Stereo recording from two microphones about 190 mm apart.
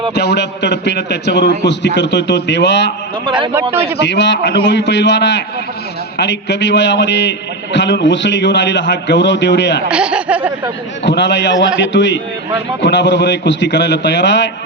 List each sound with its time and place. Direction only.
0.1 s a man's voice: 60° left (ahead or behind)
3.2 s a man's voice: 25° right (ahead or behind)
4.0 s a man's voice: 65° left (ahead or behind)
9.9 s speech: 5° right (ahead or behind)
11.0 s a man's voice: 65° left (ahead or behind)